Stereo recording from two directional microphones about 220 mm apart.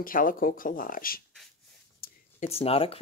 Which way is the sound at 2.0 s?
30° left (ahead or behind).